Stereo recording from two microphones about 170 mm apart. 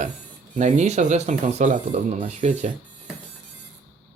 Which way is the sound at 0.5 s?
40° right (ahead or behind).